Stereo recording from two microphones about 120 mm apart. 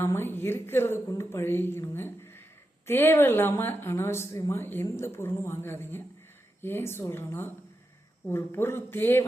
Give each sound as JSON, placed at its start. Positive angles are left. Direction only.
{"t": 0.0, "sound": "a woman's voice", "side_deg": 20}